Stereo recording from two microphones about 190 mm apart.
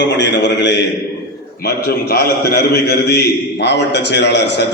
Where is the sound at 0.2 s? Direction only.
65° left (ahead or behind).